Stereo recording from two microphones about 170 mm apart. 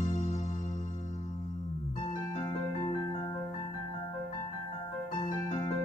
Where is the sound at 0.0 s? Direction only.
45° left (ahead or behind).